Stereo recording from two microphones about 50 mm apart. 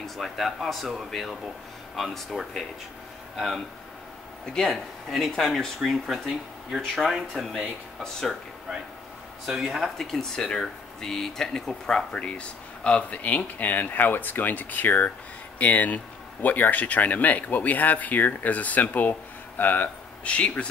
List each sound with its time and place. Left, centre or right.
0.0 s speech: centre
4.6 s speech: centre
7.3 s speech: centre
9.5 s speech: centre
9.9 s speech: centre
12.1 s speech: left
20.2 s speech: left